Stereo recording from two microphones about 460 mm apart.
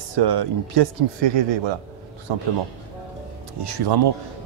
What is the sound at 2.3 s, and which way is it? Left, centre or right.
Speech, right.